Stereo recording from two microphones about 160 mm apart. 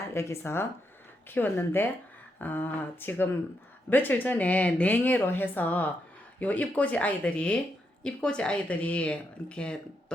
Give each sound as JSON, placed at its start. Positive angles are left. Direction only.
{"t": 0.1, "sound": "speech", "side_deg": 15}